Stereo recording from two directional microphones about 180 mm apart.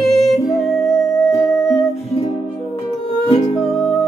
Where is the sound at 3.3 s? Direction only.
35° left (ahead or behind).